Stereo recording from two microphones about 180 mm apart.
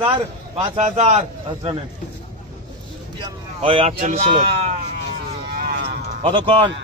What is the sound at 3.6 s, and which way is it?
Speech, 35° right (ahead or behind).